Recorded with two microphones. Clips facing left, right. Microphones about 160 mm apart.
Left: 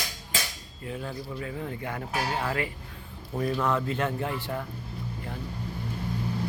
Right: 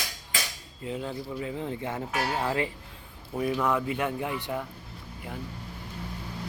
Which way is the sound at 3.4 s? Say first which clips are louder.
Even; 10° right (ahead or behind).